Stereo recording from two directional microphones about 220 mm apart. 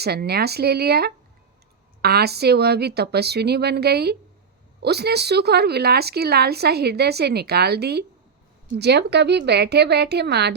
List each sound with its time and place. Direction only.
0.0 s speech: 45° right (ahead or behind)